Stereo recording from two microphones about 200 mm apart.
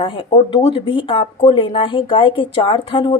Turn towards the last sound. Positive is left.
turn(degrees=25)  # may be behind; listen again after turning